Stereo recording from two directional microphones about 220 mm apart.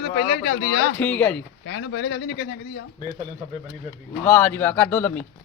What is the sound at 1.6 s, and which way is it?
Speech, 55° left (ahead or behind).